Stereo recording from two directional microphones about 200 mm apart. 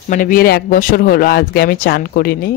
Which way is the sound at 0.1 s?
45° left (ahead or behind).